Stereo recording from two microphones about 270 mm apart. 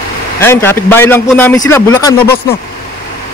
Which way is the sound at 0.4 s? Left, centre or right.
Centre.